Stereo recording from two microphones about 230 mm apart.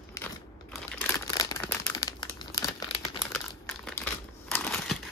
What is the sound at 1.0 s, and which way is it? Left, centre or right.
Crumpling, centre.